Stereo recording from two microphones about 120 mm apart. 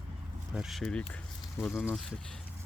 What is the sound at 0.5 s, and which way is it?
Speech, 5° right (ahead or behind).